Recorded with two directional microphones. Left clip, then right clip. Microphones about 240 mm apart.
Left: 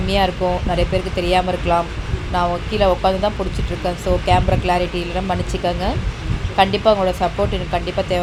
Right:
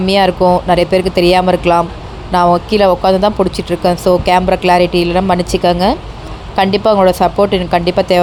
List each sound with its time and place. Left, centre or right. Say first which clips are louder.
0.0 s a woman's voice: right 8 dB; right